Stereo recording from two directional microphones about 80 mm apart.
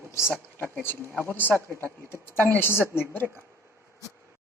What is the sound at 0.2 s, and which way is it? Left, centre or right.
Speech, left.